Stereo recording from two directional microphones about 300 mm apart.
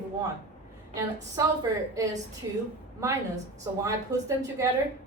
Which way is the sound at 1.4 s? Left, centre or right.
Centre.